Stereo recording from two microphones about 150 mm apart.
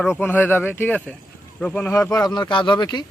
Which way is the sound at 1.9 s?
20° left (ahead or behind).